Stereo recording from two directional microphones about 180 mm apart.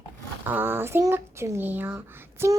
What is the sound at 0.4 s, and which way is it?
A child's voice, 10° right (ahead or behind).